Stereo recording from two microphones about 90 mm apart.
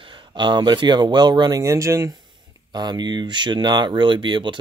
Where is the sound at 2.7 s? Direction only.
55° right (ahead or behind).